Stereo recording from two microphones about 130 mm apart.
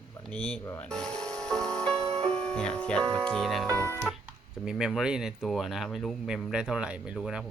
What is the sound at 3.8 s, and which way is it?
Speech, 20° left (ahead or behind).